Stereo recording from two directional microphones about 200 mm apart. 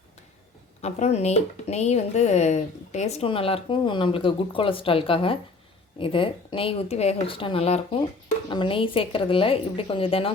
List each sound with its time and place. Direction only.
0.8 s speech: 35° left (ahead or behind)